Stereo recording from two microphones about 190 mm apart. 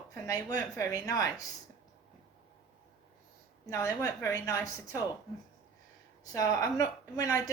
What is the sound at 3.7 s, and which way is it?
A woman's voice, 20° left (ahead or behind).